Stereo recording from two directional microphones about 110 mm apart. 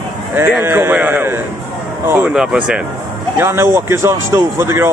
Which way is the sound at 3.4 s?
20° right (ahead or behind).